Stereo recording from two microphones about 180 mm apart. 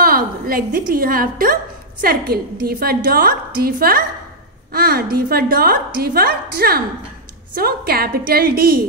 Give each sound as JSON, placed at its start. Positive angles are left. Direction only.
{"t": 0.0, "sound": "a woman's voice", "side_deg": -55}